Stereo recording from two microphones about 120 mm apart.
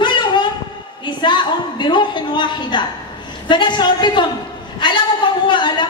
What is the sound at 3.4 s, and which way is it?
Speech, 40° left (ahead or behind).